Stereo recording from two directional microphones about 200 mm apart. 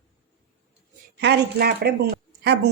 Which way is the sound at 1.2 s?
55° right (ahead or behind).